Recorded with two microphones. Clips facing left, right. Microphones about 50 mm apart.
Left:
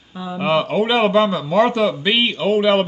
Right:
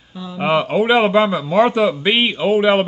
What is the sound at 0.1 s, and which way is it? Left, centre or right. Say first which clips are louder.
Speech: left 3 dB; centre.